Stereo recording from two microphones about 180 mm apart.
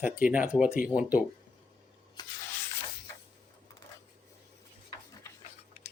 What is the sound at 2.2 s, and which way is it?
Sanding, 20° left (ahead or behind).